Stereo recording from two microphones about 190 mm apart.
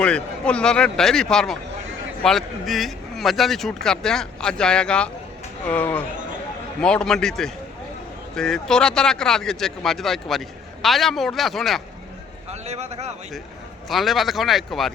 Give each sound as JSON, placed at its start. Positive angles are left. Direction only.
{"t": 0.0, "sound": "speech", "side_deg": 5}
{"t": 12.5, "sound": "a man's voice", "side_deg": -35}
{"t": 13.8, "sound": "speech", "side_deg": 0}